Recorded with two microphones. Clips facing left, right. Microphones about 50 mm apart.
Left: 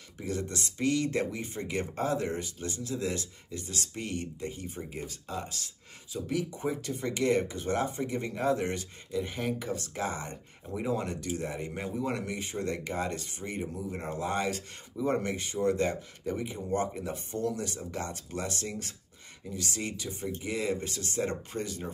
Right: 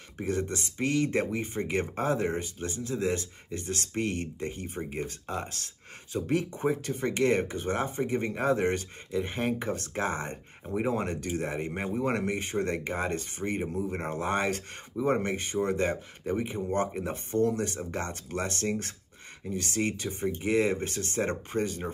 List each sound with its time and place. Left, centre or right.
0.2 s speech: right
3.4 s speech: right